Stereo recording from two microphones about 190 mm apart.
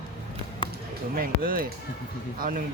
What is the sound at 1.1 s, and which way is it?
Speech, 50° right (ahead or behind).